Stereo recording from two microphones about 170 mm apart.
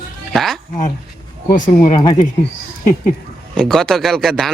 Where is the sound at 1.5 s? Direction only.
50° left (ahead or behind).